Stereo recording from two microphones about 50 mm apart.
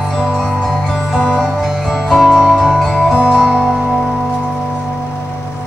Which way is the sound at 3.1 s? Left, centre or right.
Centre.